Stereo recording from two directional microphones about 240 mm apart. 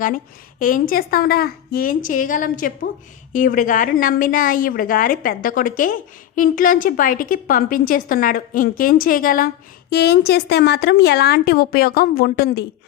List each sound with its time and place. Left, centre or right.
0.6 s a woman's voice: left